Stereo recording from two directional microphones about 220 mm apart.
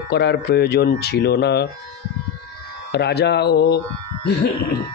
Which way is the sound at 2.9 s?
50° left (ahead or behind).